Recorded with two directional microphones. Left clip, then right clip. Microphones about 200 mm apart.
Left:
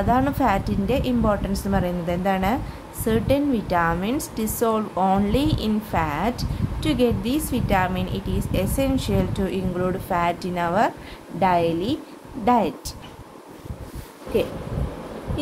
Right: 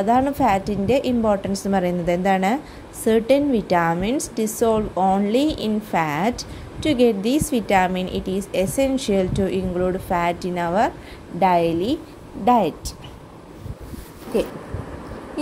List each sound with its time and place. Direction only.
0.0 s a woman's voice: 15° right (ahead or behind)